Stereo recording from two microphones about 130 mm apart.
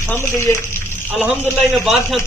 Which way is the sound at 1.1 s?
10° right (ahead or behind).